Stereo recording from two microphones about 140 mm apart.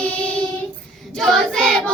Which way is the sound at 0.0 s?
10° left (ahead or behind).